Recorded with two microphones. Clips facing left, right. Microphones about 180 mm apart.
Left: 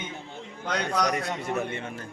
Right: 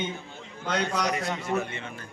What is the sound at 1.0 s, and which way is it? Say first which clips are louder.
Speech: left 1 dB; 50° left (ahead or behind).